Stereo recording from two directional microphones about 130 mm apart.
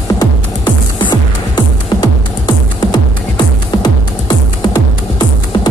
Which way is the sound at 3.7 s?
35° left (ahead or behind).